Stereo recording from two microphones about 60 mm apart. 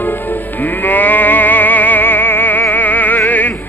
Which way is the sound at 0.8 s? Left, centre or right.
Left.